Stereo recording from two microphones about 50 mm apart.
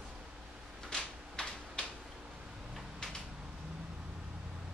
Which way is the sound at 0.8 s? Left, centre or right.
Centre.